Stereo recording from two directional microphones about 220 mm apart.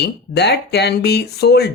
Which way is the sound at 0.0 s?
50° left (ahead or behind).